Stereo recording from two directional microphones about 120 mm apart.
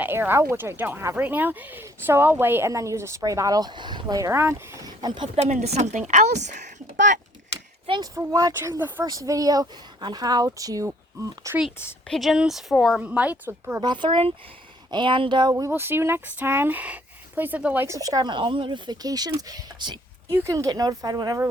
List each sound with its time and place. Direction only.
0.0 s speech: 15° right (ahead or behind)
4.9 s speech: 40° right (ahead or behind)
5.4 s a woman's voice: 70° right (ahead or behind); by 7.2 s 90° right
7.9 s speech: 40° right (ahead or behind)
8.1 s speech: 30° right (ahead or behind)
12.0 s speech: centre (ahead or behind)
13.0 s speech: 10° right (ahead or behind)
13.8 s speech: 40° right (ahead or behind)
15.7 s speech: 20° right (ahead or behind)
17.8 s speech: 30° right (ahead or behind)
20.3 s speech: 25° right (ahead or behind)